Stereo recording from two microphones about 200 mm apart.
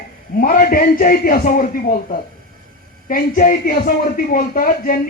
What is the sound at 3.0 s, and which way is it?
Speech, 40° left (ahead or behind).